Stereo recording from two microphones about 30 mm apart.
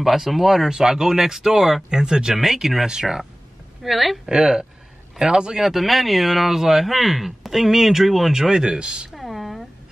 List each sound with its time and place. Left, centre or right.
0.0 s speech: centre
2.3 s speech: centre
3.8 s speech: centre
4.3 s speech: right
5.6 s speech: centre
8.3 s speech: right
9.1 s a sound: centre